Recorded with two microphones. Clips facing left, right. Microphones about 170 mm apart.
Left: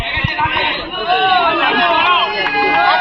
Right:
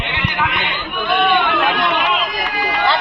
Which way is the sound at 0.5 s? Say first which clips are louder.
Left 3 dB; 60° left (ahead or behind).